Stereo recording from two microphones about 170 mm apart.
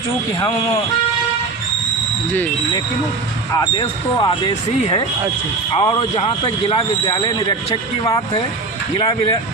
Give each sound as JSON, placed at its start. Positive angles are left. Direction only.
{"t": 3.5, "sound": "speech", "side_deg": 25}
{"t": 9.0, "sound": "speech", "side_deg": 25}